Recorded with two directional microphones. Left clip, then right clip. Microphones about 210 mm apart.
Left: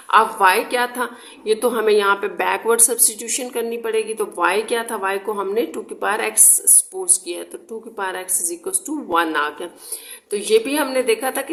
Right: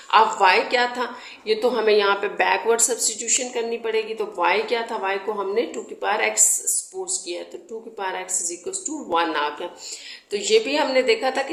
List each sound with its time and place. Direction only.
0.1 s a woman's voice: 30° left (ahead or behind)